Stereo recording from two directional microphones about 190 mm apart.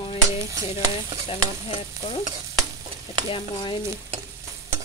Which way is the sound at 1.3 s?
30° left (ahead or behind).